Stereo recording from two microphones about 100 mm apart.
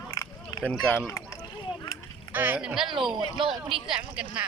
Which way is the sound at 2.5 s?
5° right (ahead or behind).